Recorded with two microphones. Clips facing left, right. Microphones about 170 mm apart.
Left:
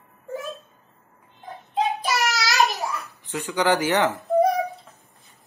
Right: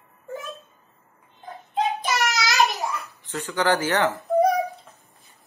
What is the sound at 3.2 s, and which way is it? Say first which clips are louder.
Speech: left 1 dB; 15° left (ahead or behind).